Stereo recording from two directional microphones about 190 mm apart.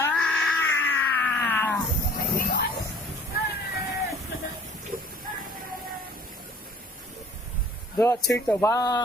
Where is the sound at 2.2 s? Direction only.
50° left (ahead or behind).